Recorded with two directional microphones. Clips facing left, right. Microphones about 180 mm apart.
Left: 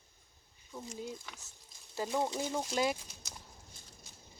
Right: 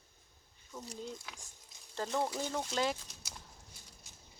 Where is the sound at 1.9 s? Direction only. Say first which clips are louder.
Left 1 dB; 10° left (ahead or behind).